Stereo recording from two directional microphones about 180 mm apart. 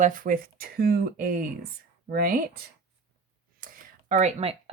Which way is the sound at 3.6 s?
45° right (ahead or behind).